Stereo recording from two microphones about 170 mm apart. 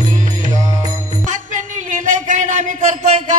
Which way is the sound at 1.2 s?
45° right (ahead or behind).